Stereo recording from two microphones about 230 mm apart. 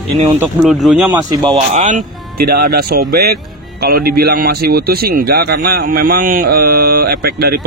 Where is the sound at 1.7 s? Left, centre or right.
Right.